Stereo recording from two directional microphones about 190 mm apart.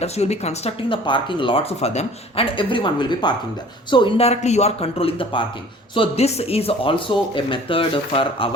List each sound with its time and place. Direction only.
0.0 s speech: 35° left (ahead or behind)